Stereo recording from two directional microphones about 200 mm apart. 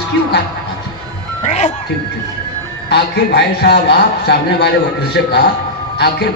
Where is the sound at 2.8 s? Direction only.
55° left (ahead or behind).